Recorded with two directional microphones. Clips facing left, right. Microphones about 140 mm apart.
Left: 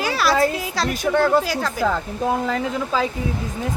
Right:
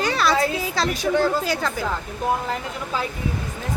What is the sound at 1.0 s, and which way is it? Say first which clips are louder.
Speech: left 4 dB; 55° left (ahead or behind).